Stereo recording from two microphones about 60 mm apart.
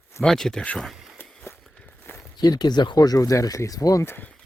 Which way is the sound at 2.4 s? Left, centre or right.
Left.